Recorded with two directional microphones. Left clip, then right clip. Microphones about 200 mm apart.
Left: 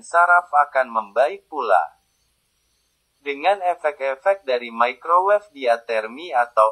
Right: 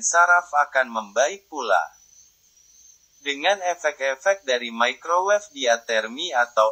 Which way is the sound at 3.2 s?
25° right (ahead or behind).